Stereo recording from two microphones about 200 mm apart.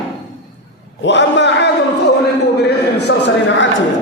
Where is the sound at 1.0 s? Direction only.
60° left (ahead or behind).